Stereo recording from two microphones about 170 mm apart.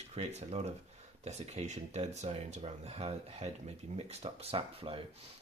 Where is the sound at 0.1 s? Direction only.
40° right (ahead or behind).